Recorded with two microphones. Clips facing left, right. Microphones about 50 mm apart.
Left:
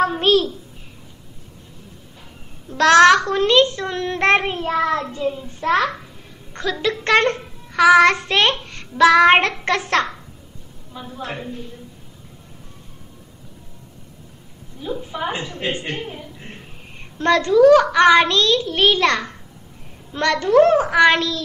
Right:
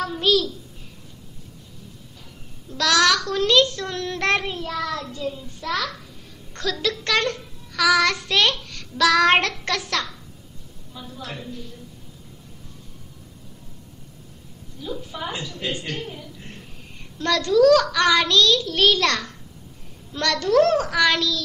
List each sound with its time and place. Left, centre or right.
0.0 s a child's voice: left
2.7 s a child's voice: left
14.8 s a woman's voice: left